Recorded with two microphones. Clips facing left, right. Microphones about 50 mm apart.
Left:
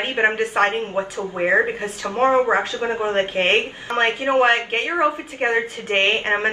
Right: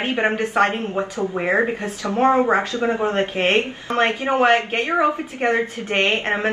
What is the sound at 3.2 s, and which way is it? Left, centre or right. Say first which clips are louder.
A woman's voice: even; left.